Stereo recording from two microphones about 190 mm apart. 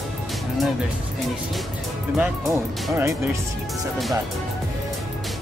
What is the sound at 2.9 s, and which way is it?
Speech, 15° right (ahead or behind).